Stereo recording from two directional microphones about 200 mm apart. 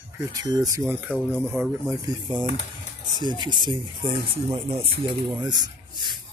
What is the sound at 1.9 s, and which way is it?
Speech, 20° right (ahead or behind).